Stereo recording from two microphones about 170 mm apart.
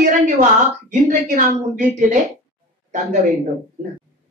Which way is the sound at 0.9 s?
50° right (ahead or behind).